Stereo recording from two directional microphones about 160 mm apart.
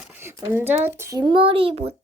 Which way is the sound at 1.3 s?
35° right (ahead or behind).